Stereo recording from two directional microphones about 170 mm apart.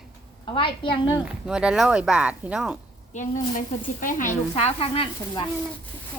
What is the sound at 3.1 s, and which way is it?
Speech, 50° left (ahead or behind).